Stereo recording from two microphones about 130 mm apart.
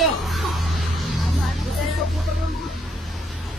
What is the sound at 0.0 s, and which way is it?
Music, centre (ahead or behind).